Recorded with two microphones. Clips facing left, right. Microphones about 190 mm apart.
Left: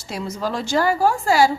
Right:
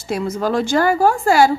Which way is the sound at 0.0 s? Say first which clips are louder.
Right 6 dB; 55° right (ahead or behind).